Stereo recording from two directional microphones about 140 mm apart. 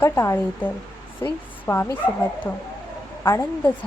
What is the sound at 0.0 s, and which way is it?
Speech, 20° left (ahead or behind).